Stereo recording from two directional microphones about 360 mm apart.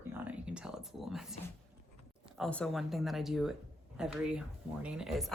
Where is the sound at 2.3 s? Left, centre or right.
Centre.